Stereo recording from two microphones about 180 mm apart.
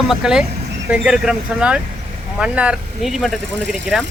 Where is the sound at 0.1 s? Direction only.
5° right (ahead or behind).